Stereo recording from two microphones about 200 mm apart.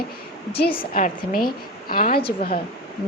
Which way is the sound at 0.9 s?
45° left (ahead or behind).